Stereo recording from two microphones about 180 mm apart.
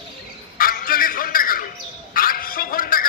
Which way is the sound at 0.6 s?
55° left (ahead or behind).